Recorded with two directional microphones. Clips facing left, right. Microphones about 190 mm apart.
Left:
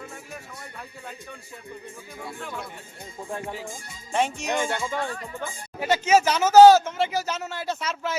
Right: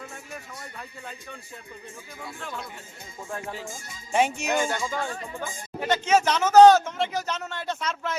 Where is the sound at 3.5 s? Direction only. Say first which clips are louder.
Left 1 dB; 15° left (ahead or behind).